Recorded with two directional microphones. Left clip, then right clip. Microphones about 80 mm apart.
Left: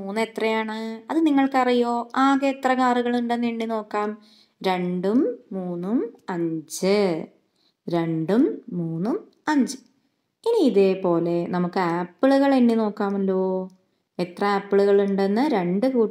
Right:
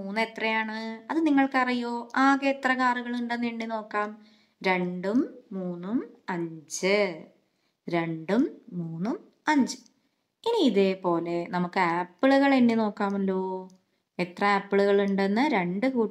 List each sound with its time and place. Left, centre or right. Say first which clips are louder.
0.0 s a woman's voice: left 4 dB; left
8.4 s speech: left 6 dB; centre